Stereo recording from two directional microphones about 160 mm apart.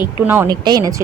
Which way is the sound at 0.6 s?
25° right (ahead or behind).